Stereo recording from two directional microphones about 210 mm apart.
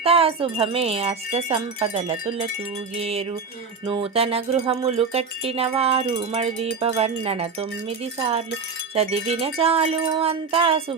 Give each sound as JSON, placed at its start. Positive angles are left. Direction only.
{"t": 0.0, "sound": "wind chime", "side_deg": -25}